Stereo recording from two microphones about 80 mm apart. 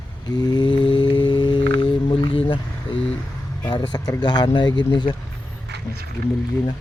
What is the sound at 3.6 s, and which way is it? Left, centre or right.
Speech, left.